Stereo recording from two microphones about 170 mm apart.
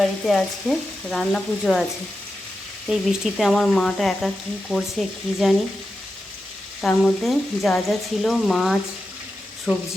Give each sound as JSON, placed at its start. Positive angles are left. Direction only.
{"t": 0.3, "sound": "frying", "side_deg": 5}
{"t": 2.9, "sound": "frying", "side_deg": 0}
{"t": 6.8, "sound": "frying", "side_deg": 0}
{"t": 9.7, "sound": "speech", "side_deg": -5}